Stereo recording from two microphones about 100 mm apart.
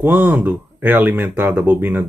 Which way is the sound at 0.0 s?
20° right (ahead or behind).